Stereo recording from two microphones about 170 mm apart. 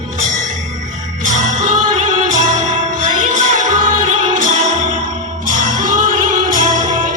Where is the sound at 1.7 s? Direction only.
45° right (ahead or behind).